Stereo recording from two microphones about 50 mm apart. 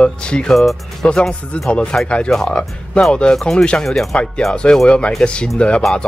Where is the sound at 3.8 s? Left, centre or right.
Centre.